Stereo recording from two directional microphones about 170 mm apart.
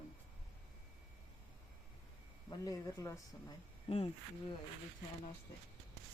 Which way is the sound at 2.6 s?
20° left (ahead or behind).